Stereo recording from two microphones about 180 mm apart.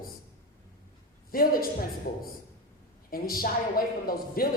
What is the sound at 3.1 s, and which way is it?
A woman's voice, 55° left (ahead or behind).